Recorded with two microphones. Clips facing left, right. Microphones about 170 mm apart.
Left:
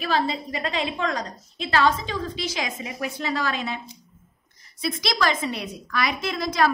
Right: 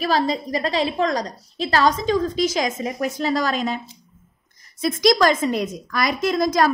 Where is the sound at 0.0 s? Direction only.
40° right (ahead or behind).